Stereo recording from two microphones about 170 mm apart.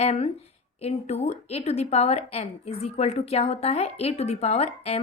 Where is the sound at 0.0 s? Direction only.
40° left (ahead or behind).